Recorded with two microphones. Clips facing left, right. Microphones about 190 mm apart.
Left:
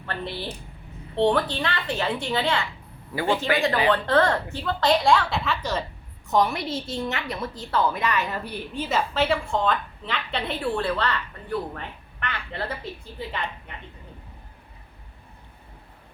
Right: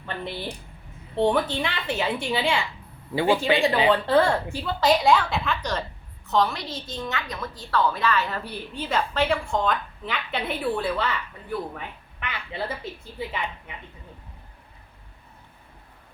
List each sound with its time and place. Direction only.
0.0 s a woman's voice: 15° right (ahead or behind); by 5.8 s 5° left (ahead or behind)
6.3 s a woman's voice: 20° left (ahead or behind); by 13.7 s 10° right (ahead or behind)